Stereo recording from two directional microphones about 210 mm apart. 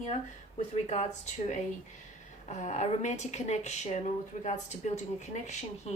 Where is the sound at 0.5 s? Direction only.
35° left (ahead or behind).